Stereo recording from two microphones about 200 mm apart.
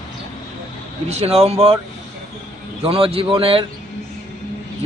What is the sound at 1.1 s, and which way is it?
Speech, 30° right (ahead or behind).